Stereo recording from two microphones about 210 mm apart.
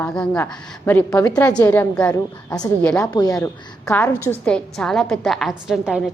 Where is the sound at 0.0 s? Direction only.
5° left (ahead or behind).